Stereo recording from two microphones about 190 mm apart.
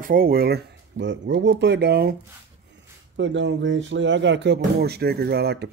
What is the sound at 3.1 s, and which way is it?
Speech, 75° right (ahead or behind).